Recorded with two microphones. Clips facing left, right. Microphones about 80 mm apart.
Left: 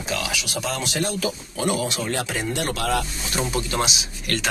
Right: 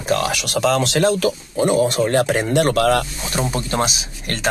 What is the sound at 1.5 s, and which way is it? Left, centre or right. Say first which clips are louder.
Speech: right 9 dB; right.